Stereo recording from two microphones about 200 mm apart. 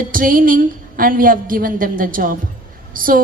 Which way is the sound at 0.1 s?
45° right (ahead or behind).